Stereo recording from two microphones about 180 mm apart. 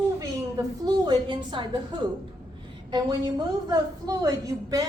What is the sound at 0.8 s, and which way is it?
A woman's voice, 25° right (ahead or behind).